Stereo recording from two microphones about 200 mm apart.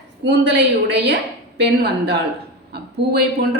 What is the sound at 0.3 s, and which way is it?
Speech, 60° right (ahead or behind).